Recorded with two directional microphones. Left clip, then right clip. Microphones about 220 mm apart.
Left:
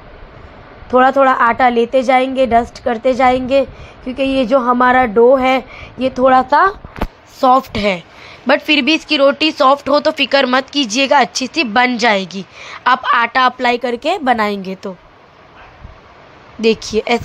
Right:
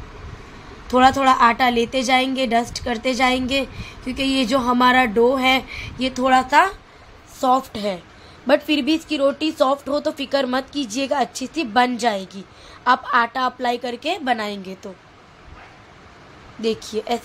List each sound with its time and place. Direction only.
0.8 s a woman's voice: 10° left (ahead or behind)
16.9 s a woman's voice: 20° left (ahead or behind)